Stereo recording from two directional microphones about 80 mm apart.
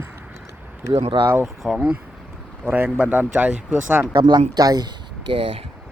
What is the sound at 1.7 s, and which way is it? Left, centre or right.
Speech, centre.